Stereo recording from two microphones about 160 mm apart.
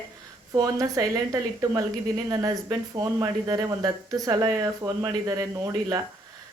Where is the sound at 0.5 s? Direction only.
25° right (ahead or behind).